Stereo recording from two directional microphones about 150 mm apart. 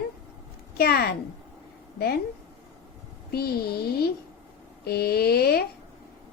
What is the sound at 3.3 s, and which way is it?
A woman's voice, 90° left.